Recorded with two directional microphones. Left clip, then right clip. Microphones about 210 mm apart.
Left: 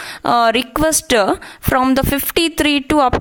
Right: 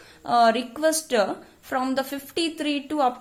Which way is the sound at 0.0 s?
35° left (ahead or behind).